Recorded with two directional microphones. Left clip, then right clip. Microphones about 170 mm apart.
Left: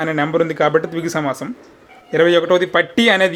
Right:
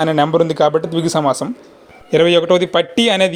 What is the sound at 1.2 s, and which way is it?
Speech, 10° left (ahead or behind).